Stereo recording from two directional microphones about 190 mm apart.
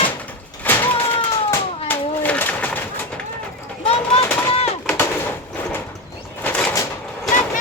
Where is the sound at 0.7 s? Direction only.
10° left (ahead or behind).